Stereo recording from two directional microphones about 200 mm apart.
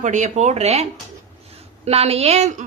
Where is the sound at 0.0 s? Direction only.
35° right (ahead or behind).